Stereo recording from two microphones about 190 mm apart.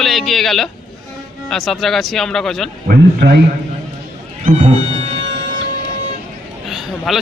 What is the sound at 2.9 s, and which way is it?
Speech, 50° right (ahead or behind).